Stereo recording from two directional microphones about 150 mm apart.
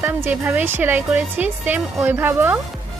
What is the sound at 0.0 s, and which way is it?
A woman's voice, 15° right (ahead or behind).